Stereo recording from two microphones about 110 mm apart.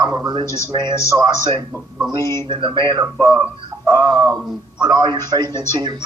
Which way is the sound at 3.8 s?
35° right (ahead or behind).